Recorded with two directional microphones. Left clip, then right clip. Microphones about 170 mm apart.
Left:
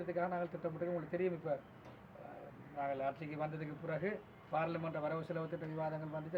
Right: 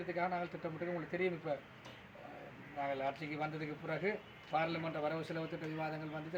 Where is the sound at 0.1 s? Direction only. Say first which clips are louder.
Right 1 dB; 5° left (ahead or behind).